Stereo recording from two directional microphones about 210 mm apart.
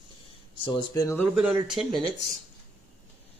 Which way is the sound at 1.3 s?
5° right (ahead or behind).